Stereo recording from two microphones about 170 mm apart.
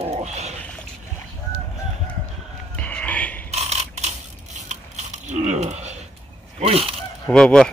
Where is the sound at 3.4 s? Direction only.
40° right (ahead or behind).